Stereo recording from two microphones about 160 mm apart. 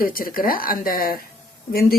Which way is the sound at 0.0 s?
65° left (ahead or behind).